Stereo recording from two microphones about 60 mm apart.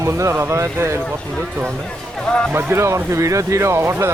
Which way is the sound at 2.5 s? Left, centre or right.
Right.